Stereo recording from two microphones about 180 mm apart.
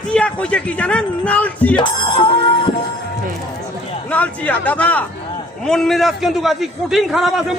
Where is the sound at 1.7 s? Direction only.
25° left (ahead or behind).